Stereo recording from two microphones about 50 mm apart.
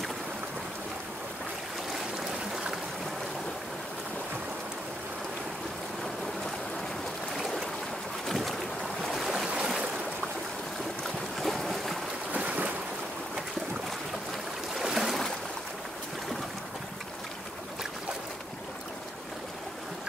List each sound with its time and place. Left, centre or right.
7.3 s boat: centre
9.0 s a sound: centre
9.6 s a sound: centre
11.4 s boat: centre
12.3 s boat: right
14.8 s boat: centre